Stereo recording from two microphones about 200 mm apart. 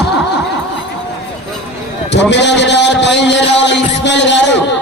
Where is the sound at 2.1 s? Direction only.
60° left (ahead or behind).